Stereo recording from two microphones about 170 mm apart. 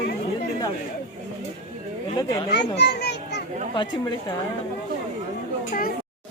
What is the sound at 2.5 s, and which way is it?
Speech, 70° left (ahead or behind).